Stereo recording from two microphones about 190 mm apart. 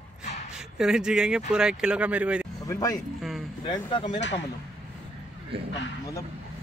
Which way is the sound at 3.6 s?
25° left (ahead or behind).